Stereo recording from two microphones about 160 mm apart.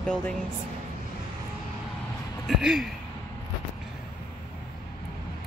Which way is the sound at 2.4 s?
Centre (ahead or behind).